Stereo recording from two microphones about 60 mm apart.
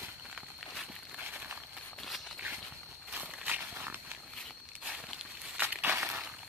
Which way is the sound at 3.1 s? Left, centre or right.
Right.